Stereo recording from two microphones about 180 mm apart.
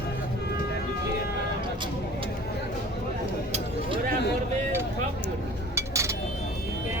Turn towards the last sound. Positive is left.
turn(degrees=-15)  # may be behind; listen again after turning